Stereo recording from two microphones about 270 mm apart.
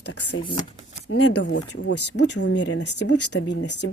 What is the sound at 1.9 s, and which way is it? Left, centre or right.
Speech, left.